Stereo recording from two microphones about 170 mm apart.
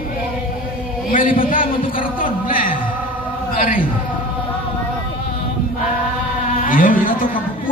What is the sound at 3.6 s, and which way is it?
Speech, 55° left (ahead or behind).